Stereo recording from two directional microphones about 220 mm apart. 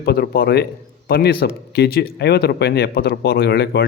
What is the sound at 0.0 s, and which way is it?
A man's voice, 45° left (ahead or behind).